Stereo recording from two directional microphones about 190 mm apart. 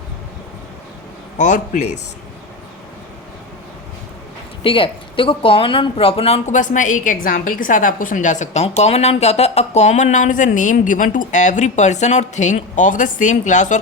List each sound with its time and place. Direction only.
1.4 s speech: 40° left (ahead or behind)
4.6 s speech: 25° left (ahead or behind)